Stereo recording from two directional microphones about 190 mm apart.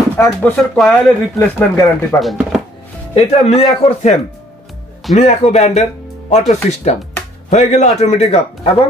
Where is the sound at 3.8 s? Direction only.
30° left (ahead or behind).